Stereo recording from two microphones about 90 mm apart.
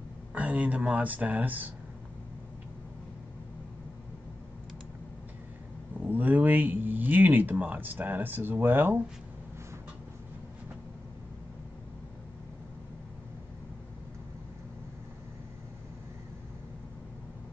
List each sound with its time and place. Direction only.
0.3 s speech: 15° right (ahead or behind)
5.9 s speech: 20° right (ahead or behind)